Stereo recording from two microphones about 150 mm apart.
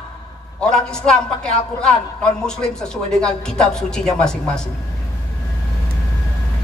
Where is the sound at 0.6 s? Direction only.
5° left (ahead or behind).